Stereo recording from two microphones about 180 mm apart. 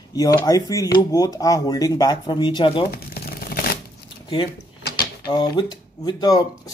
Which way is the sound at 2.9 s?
55° left (ahead or behind).